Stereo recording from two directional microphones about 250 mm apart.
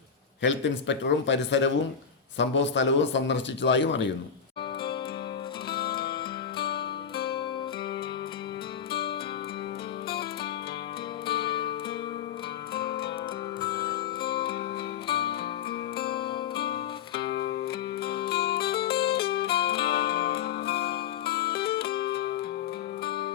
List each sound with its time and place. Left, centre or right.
0.4 s a man's voice: left
5.7 s music: left
11.4 s music: centre
13.8 s music: centre
15.1 s music: left
16.0 s music: centre
17.2 s music: left